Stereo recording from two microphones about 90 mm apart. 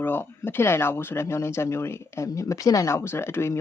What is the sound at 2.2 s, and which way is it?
Speech, 40° left (ahead or behind).